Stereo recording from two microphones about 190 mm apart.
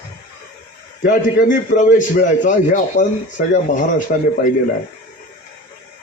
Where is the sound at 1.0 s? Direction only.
45° left (ahead or behind).